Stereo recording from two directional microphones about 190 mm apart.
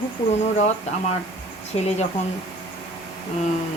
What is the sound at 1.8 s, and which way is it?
Speech, 35° left (ahead or behind).